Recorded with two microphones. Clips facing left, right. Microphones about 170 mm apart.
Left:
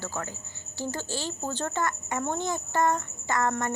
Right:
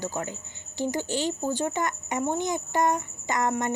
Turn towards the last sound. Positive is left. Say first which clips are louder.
# right 1 dB
turn(degrees=-20)  # may be behind; listen again after turning